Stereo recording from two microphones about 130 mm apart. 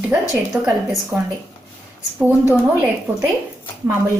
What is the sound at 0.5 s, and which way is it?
Speech, 10° right (ahead or behind).